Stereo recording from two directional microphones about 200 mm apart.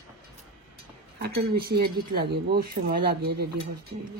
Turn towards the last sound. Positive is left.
turn(degrees=-50)  # may be behind; listen again after turning